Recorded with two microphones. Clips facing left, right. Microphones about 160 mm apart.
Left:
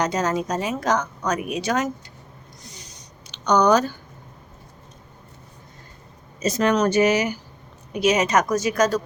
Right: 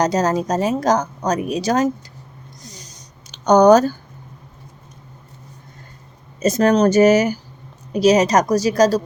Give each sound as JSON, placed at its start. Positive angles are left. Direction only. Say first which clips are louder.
{"t": 0.0, "sound": "a woman's voice", "louder": "right 5 dB", "side_deg": -40}
{"t": 2.6, "sound": "a sound", "louder": "right 4 dB", "side_deg": -40}
{"t": 6.4, "sound": "a woman's voice", "louder": "right 5 dB", "side_deg": -45}